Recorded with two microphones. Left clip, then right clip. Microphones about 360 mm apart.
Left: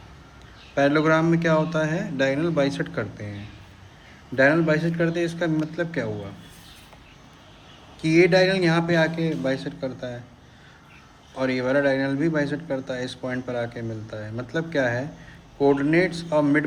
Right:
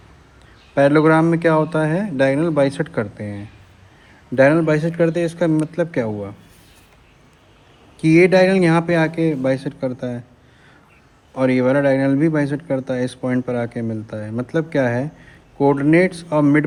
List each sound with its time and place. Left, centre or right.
0.8 s a man's voice: centre
4.4 s a man's voice: centre
8.0 s a man's voice: centre
11.3 s a man's voice: centre